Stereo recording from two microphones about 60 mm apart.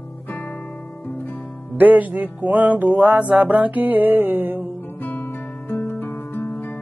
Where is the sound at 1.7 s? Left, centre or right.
Right.